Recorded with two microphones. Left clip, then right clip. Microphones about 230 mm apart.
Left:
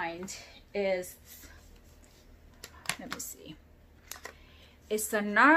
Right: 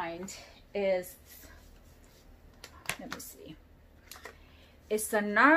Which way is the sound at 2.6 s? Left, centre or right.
Centre.